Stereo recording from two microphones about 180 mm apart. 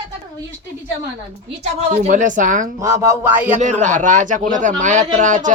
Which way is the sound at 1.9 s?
45° right (ahead or behind).